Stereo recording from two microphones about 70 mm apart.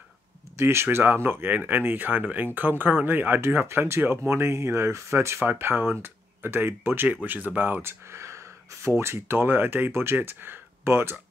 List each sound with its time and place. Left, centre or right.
0.6 s speech: right